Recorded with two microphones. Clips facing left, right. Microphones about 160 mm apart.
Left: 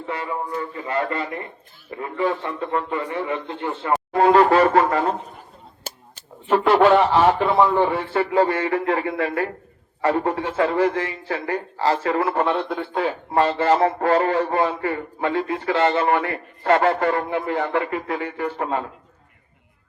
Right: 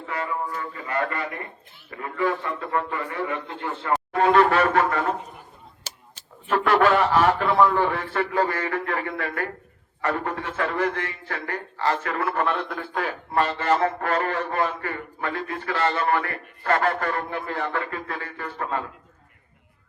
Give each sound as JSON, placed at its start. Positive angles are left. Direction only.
{"t": 0.1, "sound": "speech", "side_deg": 25}
{"t": 4.1, "sound": "speech", "side_deg": 30}
{"t": 6.5, "sound": "speech", "side_deg": 25}